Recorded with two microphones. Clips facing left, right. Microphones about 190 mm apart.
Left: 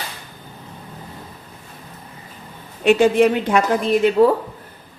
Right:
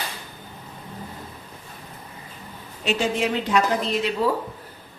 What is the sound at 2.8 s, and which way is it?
A woman's voice, 55° left (ahead or behind).